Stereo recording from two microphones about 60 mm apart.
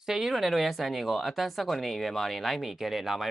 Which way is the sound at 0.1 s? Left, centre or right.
Centre.